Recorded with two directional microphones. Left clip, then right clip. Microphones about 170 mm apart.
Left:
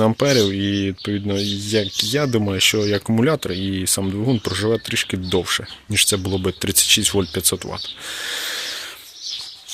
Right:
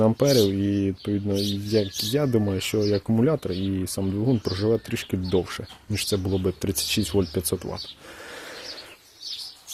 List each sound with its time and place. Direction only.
0.0 s speech: 10° left (ahead or behind)
4.0 s speech: 20° left (ahead or behind)
4.7 s speech: centre (ahead or behind)